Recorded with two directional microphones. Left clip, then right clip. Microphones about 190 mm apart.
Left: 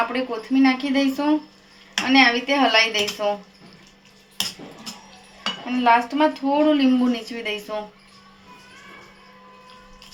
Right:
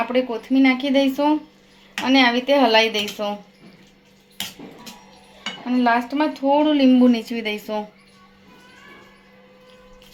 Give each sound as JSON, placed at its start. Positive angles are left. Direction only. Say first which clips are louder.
{"t": 0.1, "sound": "speech", "louder": "right 3 dB", "side_deg": -45}
{"t": 5.6, "sound": "speech", "louder": "left 2 dB", "side_deg": -45}